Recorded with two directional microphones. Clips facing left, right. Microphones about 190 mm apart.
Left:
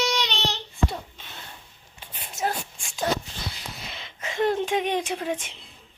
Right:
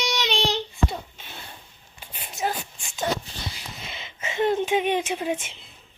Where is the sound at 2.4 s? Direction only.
5° right (ahead or behind).